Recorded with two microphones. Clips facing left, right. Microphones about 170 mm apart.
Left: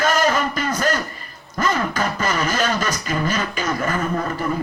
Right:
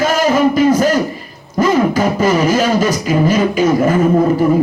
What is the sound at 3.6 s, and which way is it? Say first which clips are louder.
Speech: right 12 dB; 20° right (ahead or behind).